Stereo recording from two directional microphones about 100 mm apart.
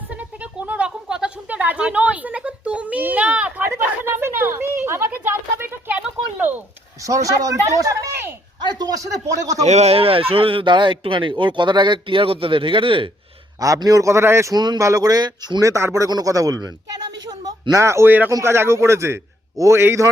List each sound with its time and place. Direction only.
0.2 s a sound: 15° right (ahead or behind)
7.0 s a woman's voice: 35° right (ahead or behind)
9.7 s speech: 85° right; by 13.1 s 60° right (ahead or behind)
13.6 s a woman's voice: 35° right (ahead or behind)
14.5 s a woman's voice: 45° right (ahead or behind)
15.6 s a woman's voice: 30° right (ahead or behind)